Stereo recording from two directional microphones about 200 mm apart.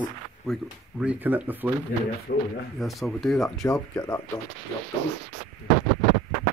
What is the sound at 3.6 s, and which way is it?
Speech, 15° left (ahead or behind).